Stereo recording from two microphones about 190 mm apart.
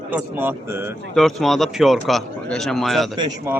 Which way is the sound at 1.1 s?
Centre (ahead or behind).